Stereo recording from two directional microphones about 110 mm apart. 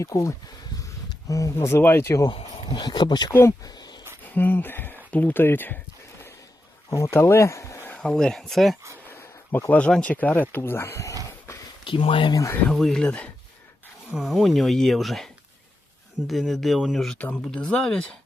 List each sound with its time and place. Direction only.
0.0 s speech: 25° left (ahead or behind)
2.6 s speech: 40° left (ahead or behind)
3.6 s a sound: 40° left (ahead or behind)
4.4 s speech: 20° left (ahead or behind)
6.9 s speech: 25° left (ahead or behind)
7.9 s speech: 10° left (ahead or behind)
9.0 s speech: 20° left (ahead or behind)
11.9 s speech: 55° left (ahead or behind)
12.3 s speech: 30° left (ahead or behind)
12.6 s speech: 5° left (ahead or behind)
17.2 s speech: 15° left (ahead or behind)